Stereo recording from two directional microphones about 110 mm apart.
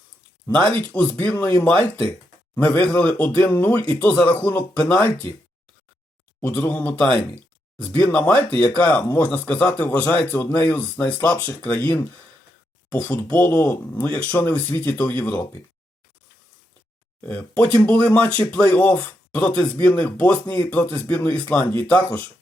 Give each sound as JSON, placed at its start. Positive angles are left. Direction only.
{"t": 0.5, "sound": "a man's voice", "side_deg": 15}
{"t": 6.4, "sound": "a man's voice", "side_deg": 10}
{"t": 17.2, "sound": "a man's voice", "side_deg": 15}